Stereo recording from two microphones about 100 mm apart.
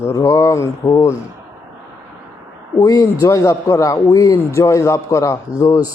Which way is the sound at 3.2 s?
30° left (ahead or behind).